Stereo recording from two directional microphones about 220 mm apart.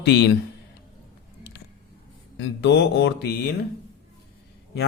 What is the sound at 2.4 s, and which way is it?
Speech, 55° left (ahead or behind).